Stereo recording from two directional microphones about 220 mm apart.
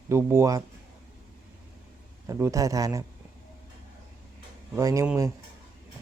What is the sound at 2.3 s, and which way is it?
Speech, 15° right (ahead or behind).